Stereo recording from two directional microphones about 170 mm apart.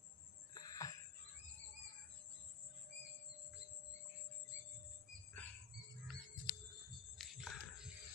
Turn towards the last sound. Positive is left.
turn(degrees=0)  # may be behind; listen again after turning